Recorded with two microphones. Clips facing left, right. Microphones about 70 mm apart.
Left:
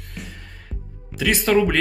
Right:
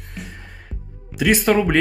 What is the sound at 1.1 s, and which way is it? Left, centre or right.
Speech, centre.